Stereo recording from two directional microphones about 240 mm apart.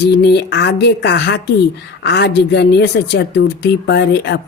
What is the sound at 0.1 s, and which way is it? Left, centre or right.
Speech, left.